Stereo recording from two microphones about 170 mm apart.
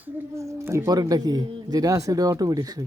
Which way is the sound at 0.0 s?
15° right (ahead or behind).